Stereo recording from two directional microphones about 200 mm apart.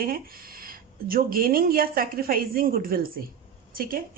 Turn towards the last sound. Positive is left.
turn(degrees=-45)  # may be behind; listen again after turning